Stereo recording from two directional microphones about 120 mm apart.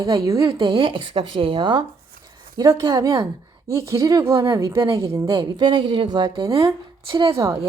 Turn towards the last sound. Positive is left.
turn(degrees=-30)  # may be behind; listen again after turning